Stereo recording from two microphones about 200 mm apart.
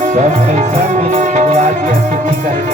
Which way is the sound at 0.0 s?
40° right (ahead or behind).